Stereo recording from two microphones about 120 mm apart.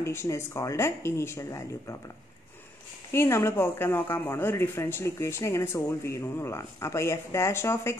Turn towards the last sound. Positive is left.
turn(degrees=20)  # may be behind; listen again after turning